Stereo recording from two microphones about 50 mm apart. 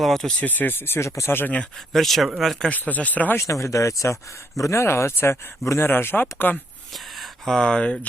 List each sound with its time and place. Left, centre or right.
0.0 s speech: centre
0.3 s speech: left
0.9 s speech: left
1.3 s speech: left
1.9 s speech: centre
2.6 s speech: left
3.3 s speech: left
7.2 s speech: centre